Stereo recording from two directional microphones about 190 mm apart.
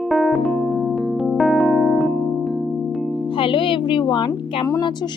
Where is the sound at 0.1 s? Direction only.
Centre (ahead or behind).